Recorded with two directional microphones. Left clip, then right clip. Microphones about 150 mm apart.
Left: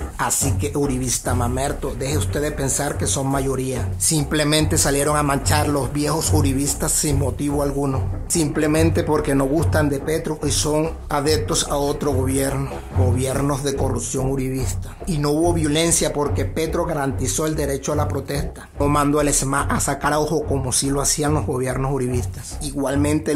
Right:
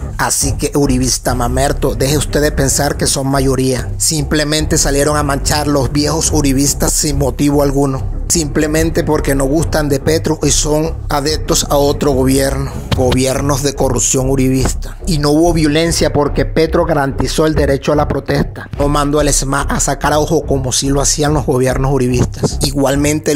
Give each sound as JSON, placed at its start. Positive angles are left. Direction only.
{"t": 0.2, "sound": "speech", "side_deg": -35}
{"t": 9.7, "sound": "speech", "side_deg": -40}